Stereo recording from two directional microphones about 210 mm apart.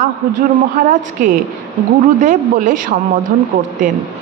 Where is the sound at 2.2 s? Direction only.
35° right (ahead or behind).